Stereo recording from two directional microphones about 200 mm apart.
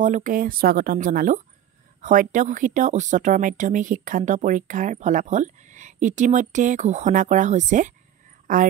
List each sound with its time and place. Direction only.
0.0 s speech: 40° right (ahead or behind)